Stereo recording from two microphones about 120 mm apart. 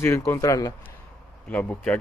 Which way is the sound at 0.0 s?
20° left (ahead or behind).